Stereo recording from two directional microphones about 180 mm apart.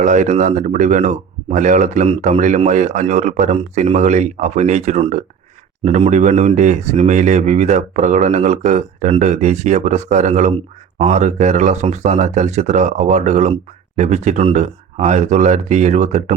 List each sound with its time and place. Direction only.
0.0 s speech: 45° right (ahead or behind)